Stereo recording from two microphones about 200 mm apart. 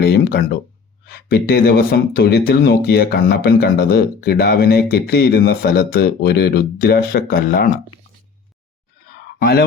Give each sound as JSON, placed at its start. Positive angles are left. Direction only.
{"t": 0.0, "sound": "speech", "side_deg": 50}
{"t": 9.4, "sound": "speech", "side_deg": 50}